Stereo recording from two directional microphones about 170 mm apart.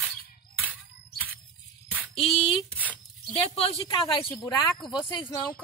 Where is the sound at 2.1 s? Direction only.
35° left (ahead or behind).